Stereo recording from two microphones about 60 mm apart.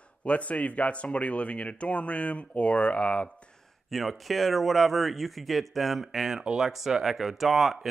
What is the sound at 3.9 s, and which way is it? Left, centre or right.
Speech, centre.